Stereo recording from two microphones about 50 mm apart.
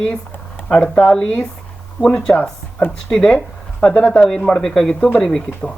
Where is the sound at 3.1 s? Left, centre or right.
Centre.